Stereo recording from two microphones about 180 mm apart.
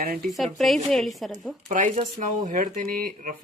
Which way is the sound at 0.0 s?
45° right (ahead or behind).